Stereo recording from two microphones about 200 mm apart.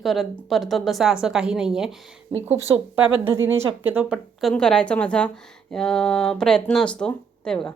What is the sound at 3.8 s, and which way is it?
A woman's voice, 5° right (ahead or behind).